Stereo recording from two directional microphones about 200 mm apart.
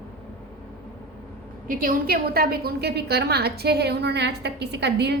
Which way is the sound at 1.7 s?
45° right (ahead or behind).